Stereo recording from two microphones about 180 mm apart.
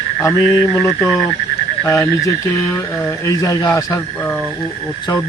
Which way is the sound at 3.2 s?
20° left (ahead or behind).